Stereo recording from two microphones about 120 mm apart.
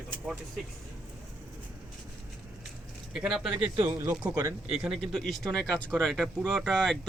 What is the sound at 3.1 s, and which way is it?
Speech, centre (ahead or behind).